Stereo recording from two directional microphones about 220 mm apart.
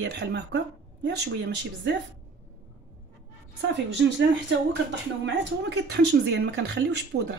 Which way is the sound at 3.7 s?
50° right (ahead or behind).